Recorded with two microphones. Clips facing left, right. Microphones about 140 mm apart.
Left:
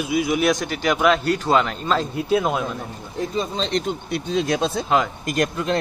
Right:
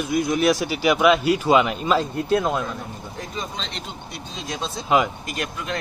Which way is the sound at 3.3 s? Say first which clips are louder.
Left 10 dB; 35° left (ahead or behind).